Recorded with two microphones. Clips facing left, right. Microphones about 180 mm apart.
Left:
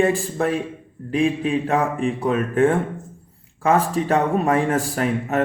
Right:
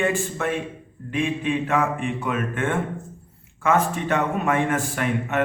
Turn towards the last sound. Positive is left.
turn(degrees=35)  # may be behind; listen again after turning